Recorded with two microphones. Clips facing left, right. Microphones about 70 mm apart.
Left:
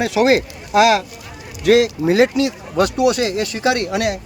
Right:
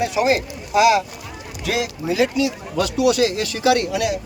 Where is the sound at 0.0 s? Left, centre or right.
Left.